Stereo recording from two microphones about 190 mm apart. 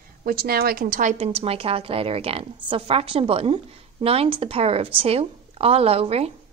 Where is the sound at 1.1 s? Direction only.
30° right (ahead or behind).